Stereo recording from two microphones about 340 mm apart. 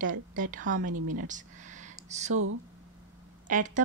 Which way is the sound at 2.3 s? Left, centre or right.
Right.